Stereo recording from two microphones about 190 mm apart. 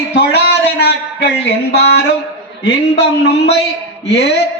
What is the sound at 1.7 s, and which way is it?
Speech, 60° left (ahead or behind).